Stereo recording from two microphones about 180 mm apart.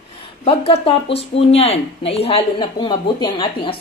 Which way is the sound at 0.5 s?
30° left (ahead or behind).